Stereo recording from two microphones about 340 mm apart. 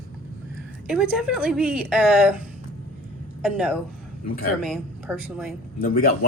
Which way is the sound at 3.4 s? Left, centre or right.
Centre.